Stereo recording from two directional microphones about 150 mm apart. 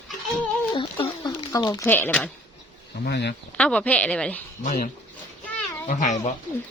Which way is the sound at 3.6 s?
10° left (ahead or behind).